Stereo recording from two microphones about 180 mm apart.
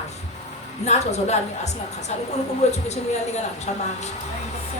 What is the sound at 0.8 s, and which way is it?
Speech, 40° left (ahead or behind).